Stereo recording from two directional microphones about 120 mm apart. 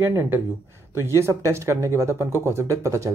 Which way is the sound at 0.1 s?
20° right (ahead or behind).